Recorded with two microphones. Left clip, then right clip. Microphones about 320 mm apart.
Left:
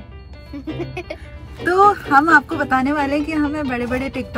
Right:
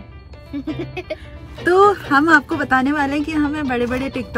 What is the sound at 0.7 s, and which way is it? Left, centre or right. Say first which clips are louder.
Music: left 3 dB; centre.